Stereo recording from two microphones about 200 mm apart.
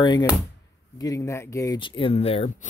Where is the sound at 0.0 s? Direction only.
20° left (ahead or behind).